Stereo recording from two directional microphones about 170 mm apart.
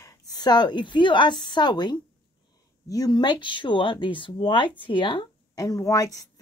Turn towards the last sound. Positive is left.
turn(degrees=20)  # may be behind; listen again after turning